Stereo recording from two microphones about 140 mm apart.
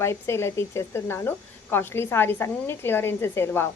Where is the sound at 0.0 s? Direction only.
20° left (ahead or behind).